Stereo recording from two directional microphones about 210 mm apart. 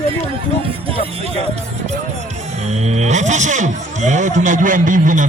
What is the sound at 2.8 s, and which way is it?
Speech, 30° right (ahead or behind).